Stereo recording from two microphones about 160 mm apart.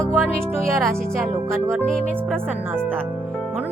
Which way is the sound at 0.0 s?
5° left (ahead or behind).